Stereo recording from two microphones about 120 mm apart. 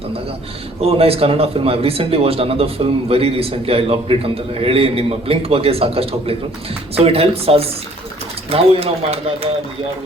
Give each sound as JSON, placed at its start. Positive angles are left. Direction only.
{"t": 0.8, "sound": "speech", "side_deg": -55}